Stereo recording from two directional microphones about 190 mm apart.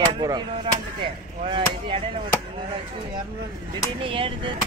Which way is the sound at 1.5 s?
25° right (ahead or behind).